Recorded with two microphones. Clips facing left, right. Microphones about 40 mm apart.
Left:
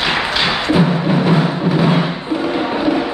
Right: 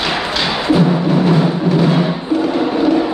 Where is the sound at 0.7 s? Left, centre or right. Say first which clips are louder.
Right 4 dB; centre.